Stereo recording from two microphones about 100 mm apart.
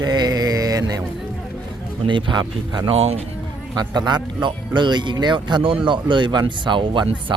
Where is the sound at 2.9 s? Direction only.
90° right.